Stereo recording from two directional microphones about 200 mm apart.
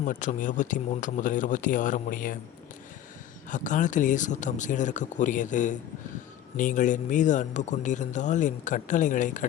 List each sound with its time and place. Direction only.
0.0 s a man's voice: 40° left (ahead or behind)
3.5 s a man's voice: 40° left (ahead or behind)